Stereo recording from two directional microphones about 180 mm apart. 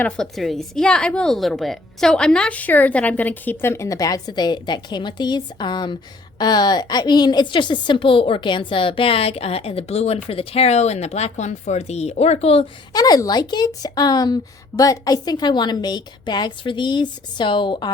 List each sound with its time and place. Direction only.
0.0 s a woman's voice: centre (ahead or behind); by 12.6 s 35° left (ahead or behind)
12.9 s a woman's voice: 20° left (ahead or behind)